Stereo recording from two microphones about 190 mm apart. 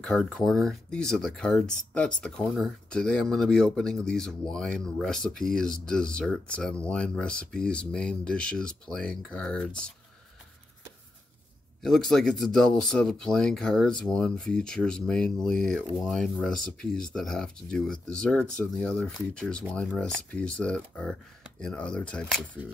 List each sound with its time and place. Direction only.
0.0 s speech: 5° left (ahead or behind)
11.8 s speech: centre (ahead or behind)